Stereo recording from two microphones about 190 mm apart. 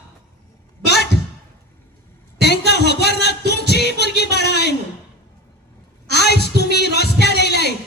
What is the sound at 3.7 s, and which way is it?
Music, 60° left (ahead or behind).